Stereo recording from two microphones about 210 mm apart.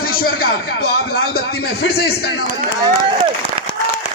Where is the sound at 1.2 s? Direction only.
50° left (ahead or behind).